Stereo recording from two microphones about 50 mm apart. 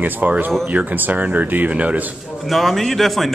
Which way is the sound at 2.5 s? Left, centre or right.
Centre.